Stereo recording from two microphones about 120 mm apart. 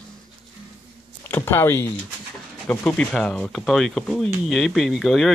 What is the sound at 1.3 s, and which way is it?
Speech, 20° left (ahead or behind).